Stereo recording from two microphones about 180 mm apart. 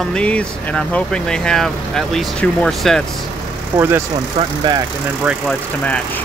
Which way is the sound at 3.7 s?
15° right (ahead or behind).